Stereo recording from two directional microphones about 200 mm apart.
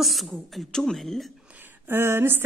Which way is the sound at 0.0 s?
Centre (ahead or behind).